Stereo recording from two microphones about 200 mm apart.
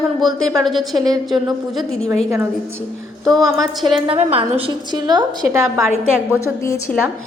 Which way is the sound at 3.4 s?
Centre (ahead or behind).